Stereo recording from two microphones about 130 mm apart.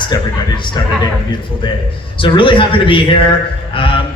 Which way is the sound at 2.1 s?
40° left (ahead or behind).